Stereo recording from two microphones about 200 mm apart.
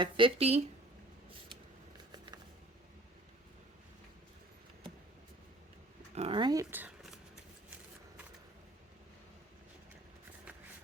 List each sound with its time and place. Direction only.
0.0 s speech: 25° right (ahead or behind)
2.1 s a sound: 20° right (ahead or behind)
6.1 s speech: 25° right (ahead or behind); by 7.2 s 5° right (ahead or behind)